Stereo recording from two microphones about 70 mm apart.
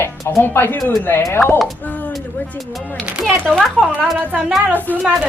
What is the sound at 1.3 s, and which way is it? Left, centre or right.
Speech, left.